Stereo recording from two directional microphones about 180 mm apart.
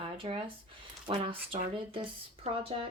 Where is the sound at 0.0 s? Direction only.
30° right (ahead or behind).